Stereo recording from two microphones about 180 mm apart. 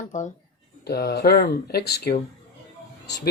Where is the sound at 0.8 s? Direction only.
65° left (ahead or behind).